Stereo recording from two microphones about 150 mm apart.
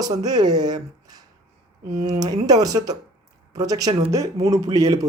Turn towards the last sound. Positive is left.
turn(degrees=-25)  # may be behind; listen again after turning